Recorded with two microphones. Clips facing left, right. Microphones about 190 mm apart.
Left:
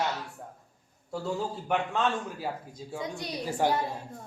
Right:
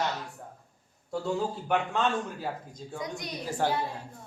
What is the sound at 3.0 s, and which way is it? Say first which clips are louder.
Speech: left 1 dB; 30° left (ahead or behind).